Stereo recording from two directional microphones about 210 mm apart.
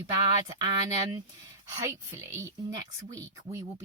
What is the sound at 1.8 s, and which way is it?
Speech, 10° right (ahead or behind).